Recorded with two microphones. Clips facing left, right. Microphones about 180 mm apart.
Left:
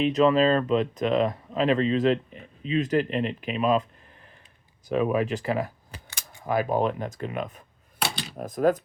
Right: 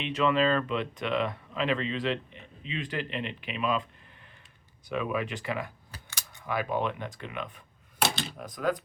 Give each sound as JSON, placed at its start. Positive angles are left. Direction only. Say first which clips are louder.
{"t": 0.0, "sound": "speech", "louder": "left 6 dB", "side_deg": 40}
{"t": 4.9, "sound": "speech", "louder": "left 7 dB", "side_deg": 40}